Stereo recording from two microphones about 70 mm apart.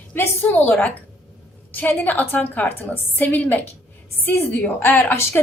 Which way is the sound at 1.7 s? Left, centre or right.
Left.